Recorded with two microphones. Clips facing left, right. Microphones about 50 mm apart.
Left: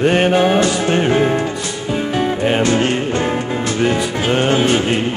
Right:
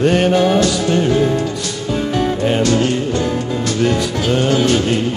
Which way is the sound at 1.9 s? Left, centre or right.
Left.